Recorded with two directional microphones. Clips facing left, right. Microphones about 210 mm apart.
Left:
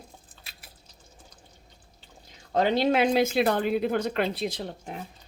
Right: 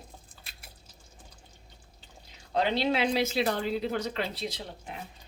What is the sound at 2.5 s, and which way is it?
Speech, 45° left (ahead or behind).